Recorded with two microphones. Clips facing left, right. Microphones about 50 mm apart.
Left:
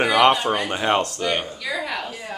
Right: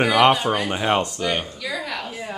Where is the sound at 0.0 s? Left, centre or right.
Centre.